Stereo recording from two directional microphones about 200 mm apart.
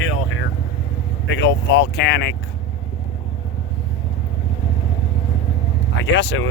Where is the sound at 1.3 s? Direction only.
60° left (ahead or behind).